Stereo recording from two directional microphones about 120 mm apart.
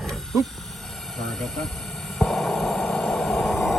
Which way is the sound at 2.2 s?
5° left (ahead or behind).